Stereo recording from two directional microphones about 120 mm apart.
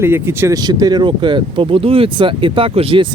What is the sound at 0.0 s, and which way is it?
Speech, 20° right (ahead or behind).